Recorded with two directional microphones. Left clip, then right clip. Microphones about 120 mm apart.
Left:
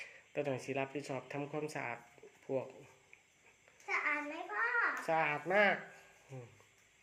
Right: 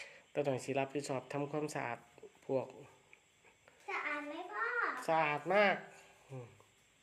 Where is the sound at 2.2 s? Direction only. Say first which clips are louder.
Right 2 dB; 20° right (ahead or behind).